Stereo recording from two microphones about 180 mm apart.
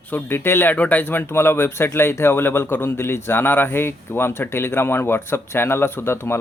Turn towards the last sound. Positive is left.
turn(degrees=15)  # may be behind; listen again after turning